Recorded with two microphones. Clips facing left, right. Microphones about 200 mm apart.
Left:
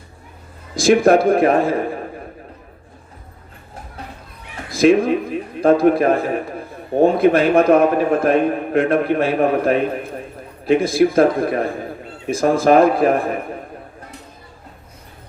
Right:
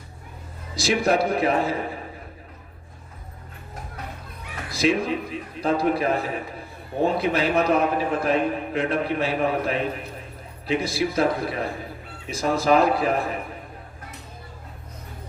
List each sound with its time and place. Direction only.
0.8 s a man's voice: 50° left (ahead or behind)
4.7 s a man's voice: 50° left (ahead or behind)